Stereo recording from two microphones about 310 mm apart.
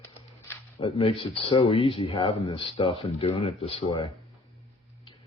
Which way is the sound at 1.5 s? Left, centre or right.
Centre.